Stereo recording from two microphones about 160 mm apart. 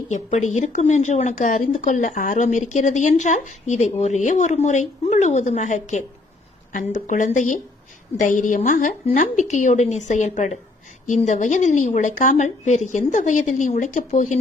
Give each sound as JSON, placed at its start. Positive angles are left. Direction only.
{"t": 0.1, "sound": "speech", "side_deg": 50}